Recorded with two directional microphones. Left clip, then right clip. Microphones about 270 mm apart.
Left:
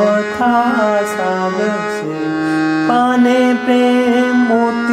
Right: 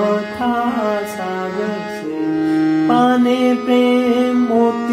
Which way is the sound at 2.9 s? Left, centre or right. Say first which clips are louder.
Left 3 dB; left.